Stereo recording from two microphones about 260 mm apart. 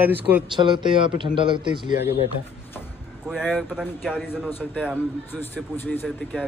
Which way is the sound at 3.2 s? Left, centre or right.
Centre.